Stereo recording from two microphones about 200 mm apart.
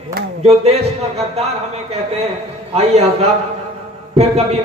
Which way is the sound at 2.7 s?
30° right (ahead or behind).